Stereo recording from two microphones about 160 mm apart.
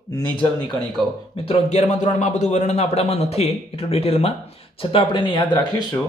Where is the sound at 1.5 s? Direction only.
45° left (ahead or behind); by 5.8 s 25° left (ahead or behind).